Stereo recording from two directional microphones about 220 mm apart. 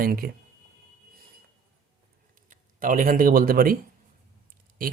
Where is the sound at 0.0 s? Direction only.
45° right (ahead or behind).